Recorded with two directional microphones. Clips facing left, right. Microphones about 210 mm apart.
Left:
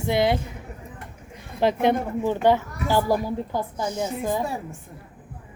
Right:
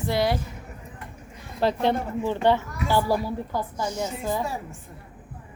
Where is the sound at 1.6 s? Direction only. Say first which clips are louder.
Left 2 dB; 15° left (ahead or behind).